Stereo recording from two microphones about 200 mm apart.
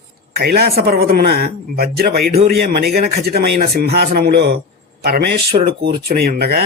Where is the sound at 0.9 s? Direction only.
50° right (ahead or behind).